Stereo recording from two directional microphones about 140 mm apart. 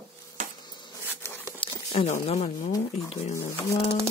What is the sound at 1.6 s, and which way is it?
Speech, 50° left (ahead or behind).